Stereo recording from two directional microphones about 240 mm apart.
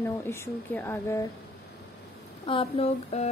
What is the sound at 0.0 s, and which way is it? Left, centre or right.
Speech, centre.